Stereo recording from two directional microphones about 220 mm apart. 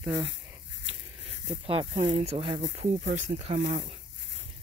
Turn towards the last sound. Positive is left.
turn(degrees=-25)  # may be behind; listen again after turning